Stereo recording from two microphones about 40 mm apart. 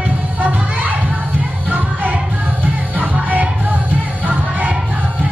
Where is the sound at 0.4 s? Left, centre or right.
Right.